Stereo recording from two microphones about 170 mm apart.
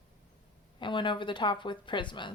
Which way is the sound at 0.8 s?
30° left (ahead or behind).